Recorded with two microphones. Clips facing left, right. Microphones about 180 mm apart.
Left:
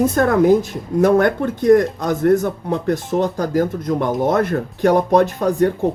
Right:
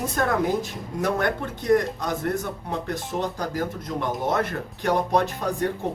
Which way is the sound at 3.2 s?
50° left (ahead or behind).